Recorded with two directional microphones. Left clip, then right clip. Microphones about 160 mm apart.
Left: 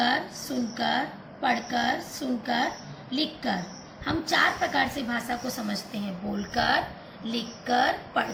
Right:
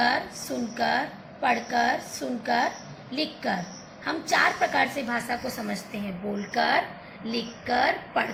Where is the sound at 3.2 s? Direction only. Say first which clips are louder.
Right 1 dB; 45° right (ahead or behind).